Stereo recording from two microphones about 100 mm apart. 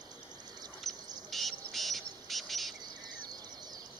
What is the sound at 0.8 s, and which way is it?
Bird, centre (ahead or behind).